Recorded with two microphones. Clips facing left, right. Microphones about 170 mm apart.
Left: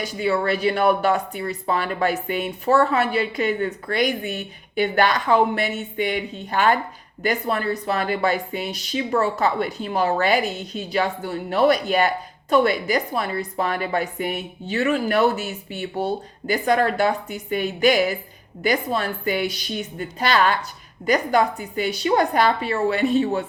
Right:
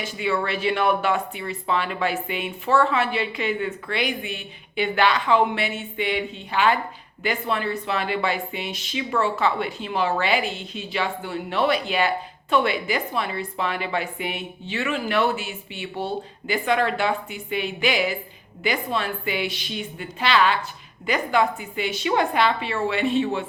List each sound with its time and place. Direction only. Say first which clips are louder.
0.0 s speech: left 3 dB; 40° left (ahead or behind)